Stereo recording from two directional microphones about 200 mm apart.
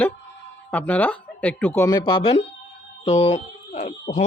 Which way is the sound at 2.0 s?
25° left (ahead or behind).